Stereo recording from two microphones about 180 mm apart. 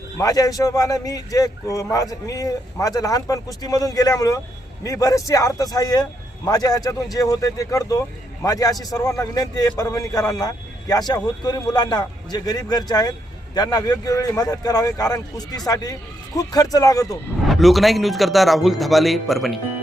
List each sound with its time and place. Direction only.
0.2 s a man's voice: 20° left (ahead or behind)
17.4 s a man's voice: centre (ahead or behind)